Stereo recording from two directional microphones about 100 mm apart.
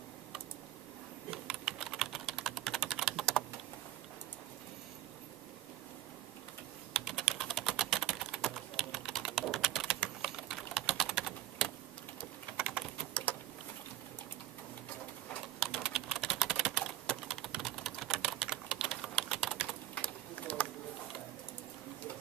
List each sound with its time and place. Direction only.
1.3 s typing: 5° right (ahead or behind)
6.9 s typing: 5° right (ahead or behind)
12.5 s a sound: 10° right (ahead or behind)
13.1 s a sound: 15° left (ahead or behind)
15.6 s typing: 5° right (ahead or behind)
19.9 s typing: 15° left (ahead or behind)